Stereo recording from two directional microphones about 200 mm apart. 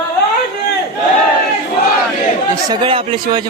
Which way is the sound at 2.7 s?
25° right (ahead or behind).